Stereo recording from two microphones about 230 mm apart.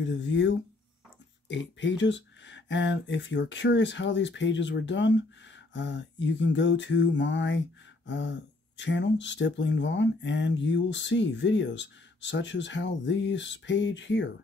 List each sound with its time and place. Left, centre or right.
0.0 s speech: left